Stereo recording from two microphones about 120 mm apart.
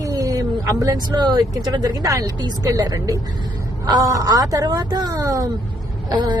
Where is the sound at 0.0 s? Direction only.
30° right (ahead or behind).